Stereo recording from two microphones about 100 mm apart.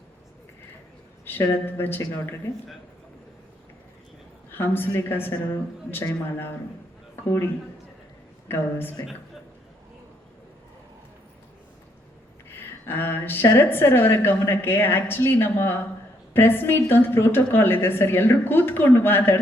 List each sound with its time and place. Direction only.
1.2 s a woman's voice: 20° left (ahead or behind)
4.5 s a woman's voice: 20° left (ahead or behind)
7.3 s a woman's voice: 25° left (ahead or behind)
12.5 s a woman's voice: 20° left (ahead or behind)